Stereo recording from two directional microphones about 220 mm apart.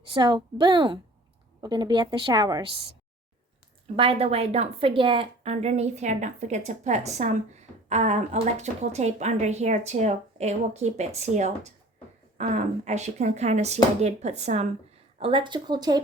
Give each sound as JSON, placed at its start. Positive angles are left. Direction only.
{"t": 0.1, "sound": "a woman's voice", "side_deg": -20}
{"t": 3.9, "sound": "a woman's voice", "side_deg": -25}